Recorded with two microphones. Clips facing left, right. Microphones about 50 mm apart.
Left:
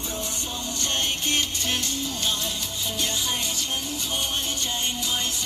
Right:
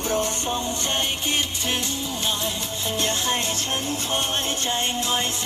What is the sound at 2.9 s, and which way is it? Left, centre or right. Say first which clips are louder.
Music: right 4 dB; right.